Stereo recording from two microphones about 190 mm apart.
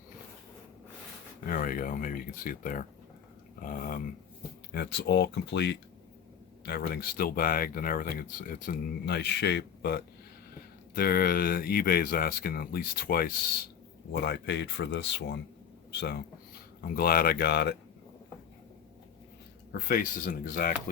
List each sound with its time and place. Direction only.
1.5 s speech: 45° left (ahead or behind)
3.6 s a sound: 45° left (ahead or behind)
4.7 s speech: 60° left (ahead or behind)
6.7 s speech: 55° left (ahead or behind)
14.1 s speech: 65° left (ahead or behind)
16.0 s speech: 60° left (ahead or behind)
19.7 s speech: 45° left (ahead or behind)